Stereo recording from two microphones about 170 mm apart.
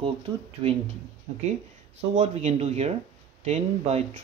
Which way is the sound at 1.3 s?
40° right (ahead or behind).